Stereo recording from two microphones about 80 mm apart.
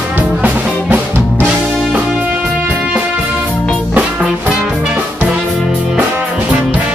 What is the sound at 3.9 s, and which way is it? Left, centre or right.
Music, centre.